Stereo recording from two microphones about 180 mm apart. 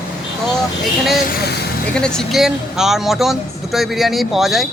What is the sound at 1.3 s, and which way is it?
Speech, 65° left (ahead or behind).